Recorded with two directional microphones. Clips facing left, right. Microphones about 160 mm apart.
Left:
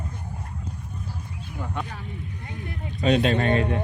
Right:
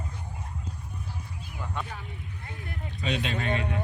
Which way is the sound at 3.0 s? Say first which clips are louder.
Left 10 dB; 40° left (ahead or behind).